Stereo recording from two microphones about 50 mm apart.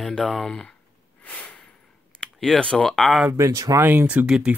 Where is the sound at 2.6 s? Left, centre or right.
Centre.